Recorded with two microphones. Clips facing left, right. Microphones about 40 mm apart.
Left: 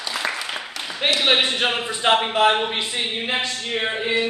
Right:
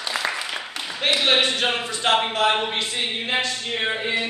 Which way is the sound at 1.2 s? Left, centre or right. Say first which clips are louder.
Left 1 dB; centre.